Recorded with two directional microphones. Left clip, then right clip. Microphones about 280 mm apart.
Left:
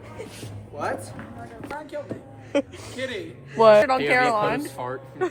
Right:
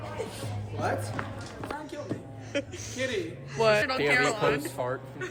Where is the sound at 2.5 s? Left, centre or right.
Left.